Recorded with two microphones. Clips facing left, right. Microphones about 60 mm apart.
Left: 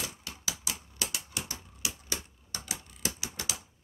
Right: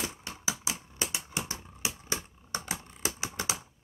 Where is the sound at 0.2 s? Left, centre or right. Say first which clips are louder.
Right 4 dB; right.